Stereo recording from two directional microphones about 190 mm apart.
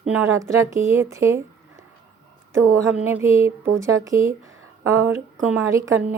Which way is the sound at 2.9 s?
10° right (ahead or behind).